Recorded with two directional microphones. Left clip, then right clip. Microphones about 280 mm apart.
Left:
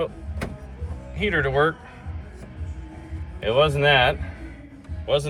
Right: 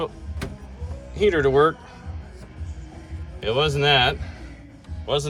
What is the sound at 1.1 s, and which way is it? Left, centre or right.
Speech, right.